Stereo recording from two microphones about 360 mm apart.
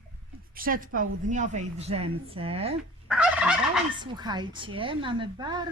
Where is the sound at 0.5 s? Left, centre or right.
Right.